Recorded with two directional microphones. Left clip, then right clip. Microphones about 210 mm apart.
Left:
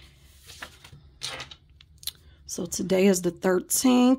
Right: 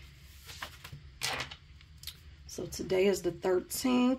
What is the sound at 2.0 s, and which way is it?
Speech, 50° left (ahead or behind).